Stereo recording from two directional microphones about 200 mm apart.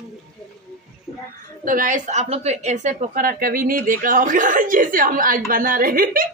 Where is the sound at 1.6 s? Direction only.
45° right (ahead or behind).